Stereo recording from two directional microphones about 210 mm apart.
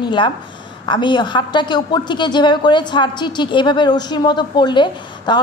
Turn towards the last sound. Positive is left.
turn(degrees=20)  # may be behind; listen again after turning